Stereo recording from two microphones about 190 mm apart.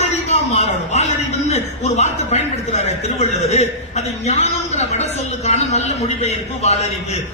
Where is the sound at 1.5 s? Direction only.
35° left (ahead or behind).